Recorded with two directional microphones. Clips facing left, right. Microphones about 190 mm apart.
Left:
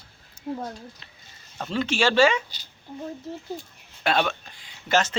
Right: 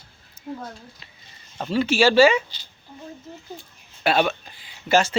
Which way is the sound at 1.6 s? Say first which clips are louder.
Right 5 dB; 5° right (ahead or behind).